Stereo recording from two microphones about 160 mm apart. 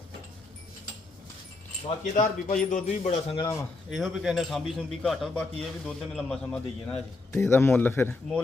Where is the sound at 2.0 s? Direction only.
50° left (ahead or behind).